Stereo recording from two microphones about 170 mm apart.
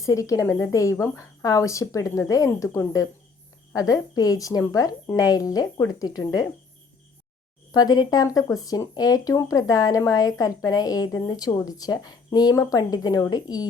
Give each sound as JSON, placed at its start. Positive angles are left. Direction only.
{"t": 0.0, "sound": "speech", "side_deg": 20}
{"t": 7.7, "sound": "speech", "side_deg": 20}